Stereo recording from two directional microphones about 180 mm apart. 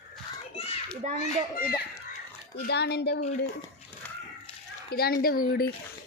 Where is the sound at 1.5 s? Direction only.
55° left (ahead or behind).